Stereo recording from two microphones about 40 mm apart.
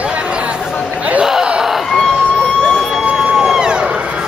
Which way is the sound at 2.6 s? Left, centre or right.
Centre.